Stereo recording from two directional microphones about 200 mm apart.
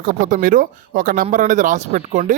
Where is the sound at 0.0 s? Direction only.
40° right (ahead or behind).